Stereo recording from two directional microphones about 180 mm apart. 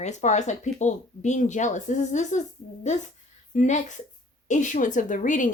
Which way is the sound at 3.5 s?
40° left (ahead or behind).